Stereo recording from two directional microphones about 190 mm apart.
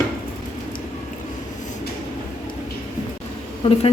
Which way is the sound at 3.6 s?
30° left (ahead or behind).